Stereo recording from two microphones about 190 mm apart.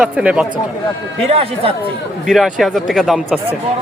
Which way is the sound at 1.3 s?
30° right (ahead or behind).